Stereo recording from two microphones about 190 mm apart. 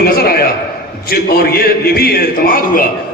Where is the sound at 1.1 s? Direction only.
55° left (ahead or behind).